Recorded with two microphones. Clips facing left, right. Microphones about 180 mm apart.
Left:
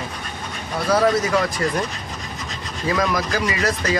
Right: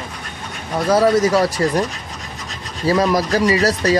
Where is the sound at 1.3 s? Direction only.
35° right (ahead or behind).